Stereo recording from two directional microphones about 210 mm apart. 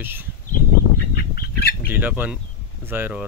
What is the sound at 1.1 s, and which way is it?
Bird, 45° left (ahead or behind).